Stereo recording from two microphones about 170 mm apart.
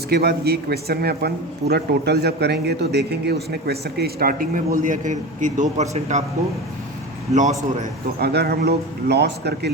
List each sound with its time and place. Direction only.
0.1 s a man's voice: 65° right (ahead or behind); by 6.2 s 40° right (ahead or behind)
8.2 s a man's voice: 70° right (ahead or behind)